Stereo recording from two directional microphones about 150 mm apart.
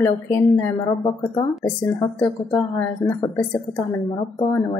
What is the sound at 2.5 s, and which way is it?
Speech, 15° left (ahead or behind).